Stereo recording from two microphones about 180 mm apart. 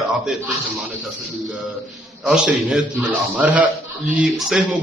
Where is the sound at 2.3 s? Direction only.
5° right (ahead or behind).